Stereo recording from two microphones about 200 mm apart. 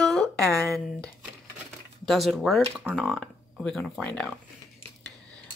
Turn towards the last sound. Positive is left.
turn(degrees=5)  # may be behind; listen again after turning